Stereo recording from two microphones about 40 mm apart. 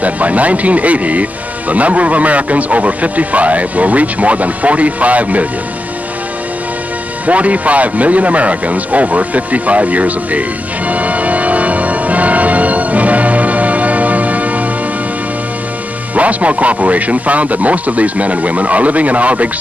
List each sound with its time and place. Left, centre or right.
0.0 s speech: right
7.2 s speech: right
10.9 s music: right
16.2 s speech: right